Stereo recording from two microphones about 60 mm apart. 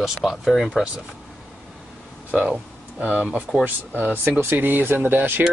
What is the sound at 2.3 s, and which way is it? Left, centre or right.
Speech, centre.